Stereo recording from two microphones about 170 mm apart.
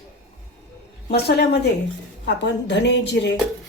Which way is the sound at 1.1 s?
75° left (ahead or behind).